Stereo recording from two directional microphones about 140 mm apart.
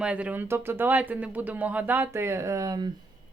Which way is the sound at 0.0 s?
10° right (ahead or behind).